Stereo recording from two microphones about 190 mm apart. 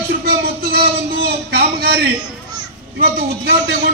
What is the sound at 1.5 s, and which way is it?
Speech, 55° right (ahead or behind).